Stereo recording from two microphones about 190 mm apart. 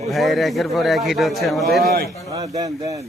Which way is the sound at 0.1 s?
Centre (ahead or behind).